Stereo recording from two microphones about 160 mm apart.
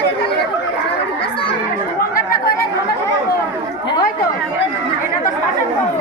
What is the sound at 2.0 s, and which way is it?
Chatter, 70° left (ahead or behind).